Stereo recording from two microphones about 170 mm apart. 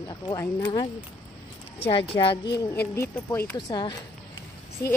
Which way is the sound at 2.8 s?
15° left (ahead or behind).